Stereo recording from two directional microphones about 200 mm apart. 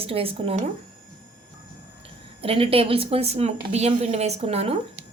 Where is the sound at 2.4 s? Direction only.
30° right (ahead or behind).